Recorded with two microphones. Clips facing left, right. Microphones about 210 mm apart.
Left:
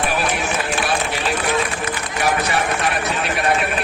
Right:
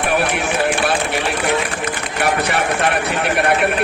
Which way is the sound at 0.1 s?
60° right (ahead or behind).